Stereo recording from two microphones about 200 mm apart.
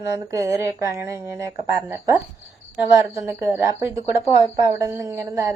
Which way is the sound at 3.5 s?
10° right (ahead or behind).